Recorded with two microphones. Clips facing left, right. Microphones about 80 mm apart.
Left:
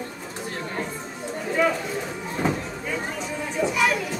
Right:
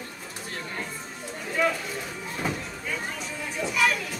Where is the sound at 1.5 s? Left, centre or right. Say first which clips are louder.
Left 3 dB; centre.